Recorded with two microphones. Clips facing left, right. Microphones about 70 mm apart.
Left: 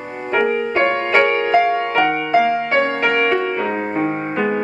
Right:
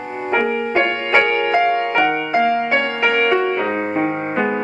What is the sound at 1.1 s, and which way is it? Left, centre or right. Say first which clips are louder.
Music: even; centre.